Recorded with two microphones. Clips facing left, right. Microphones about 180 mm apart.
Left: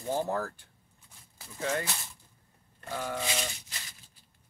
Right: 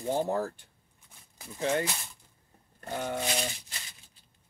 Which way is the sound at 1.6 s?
25° right (ahead or behind).